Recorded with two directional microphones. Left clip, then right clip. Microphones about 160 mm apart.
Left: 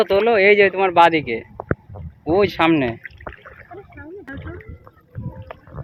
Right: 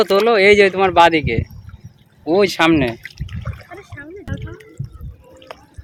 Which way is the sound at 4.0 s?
20° right (ahead or behind).